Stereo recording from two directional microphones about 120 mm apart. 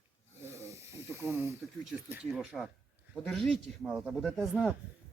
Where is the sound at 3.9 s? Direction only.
5° right (ahead or behind).